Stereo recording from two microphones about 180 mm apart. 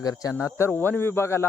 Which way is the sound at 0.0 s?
20° left (ahead or behind).